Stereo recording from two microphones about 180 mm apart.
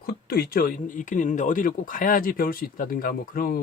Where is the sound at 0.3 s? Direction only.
55° left (ahead or behind).